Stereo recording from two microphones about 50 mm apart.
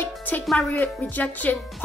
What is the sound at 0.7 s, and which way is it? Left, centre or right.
Speech, left.